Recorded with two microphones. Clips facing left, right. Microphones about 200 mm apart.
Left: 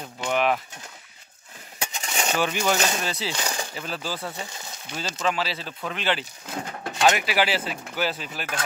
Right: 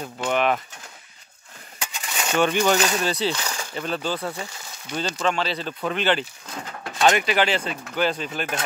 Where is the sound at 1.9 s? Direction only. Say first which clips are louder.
Left 1 dB; 25° left (ahead or behind).